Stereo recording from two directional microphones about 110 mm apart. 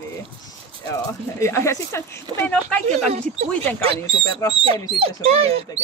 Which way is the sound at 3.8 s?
55° right (ahead or behind).